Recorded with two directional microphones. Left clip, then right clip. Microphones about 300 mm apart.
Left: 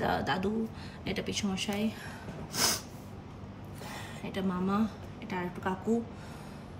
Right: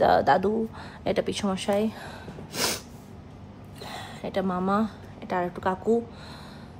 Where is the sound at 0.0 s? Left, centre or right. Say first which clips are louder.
Right 11 dB; centre.